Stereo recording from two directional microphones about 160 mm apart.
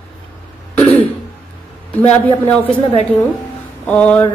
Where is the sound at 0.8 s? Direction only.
40° left (ahead or behind).